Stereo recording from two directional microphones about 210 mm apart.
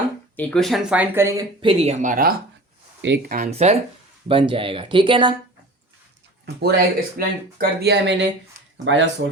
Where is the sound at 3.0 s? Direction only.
55° right (ahead or behind); by 5.3 s 20° right (ahead or behind).